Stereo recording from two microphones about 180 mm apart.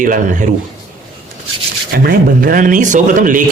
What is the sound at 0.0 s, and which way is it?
Speech, 45° right (ahead or behind).